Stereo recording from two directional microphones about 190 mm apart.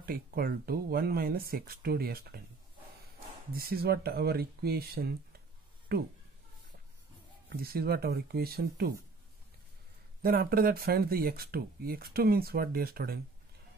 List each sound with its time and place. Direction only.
0.0 s speech: 50° right (ahead or behind)
3.5 s speech: 55° right (ahead or behind)
7.4 s speech: 55° right (ahead or behind)
10.2 s speech: 50° right (ahead or behind)